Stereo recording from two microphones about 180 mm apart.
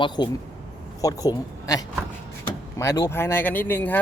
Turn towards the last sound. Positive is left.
turn(degrees=10)  # may be behind; listen again after turning